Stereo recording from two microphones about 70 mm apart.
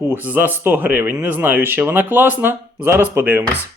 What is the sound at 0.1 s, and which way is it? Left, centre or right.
Speech, right.